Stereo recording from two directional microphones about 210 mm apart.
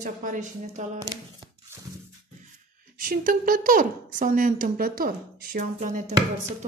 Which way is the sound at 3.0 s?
40° right (ahead or behind).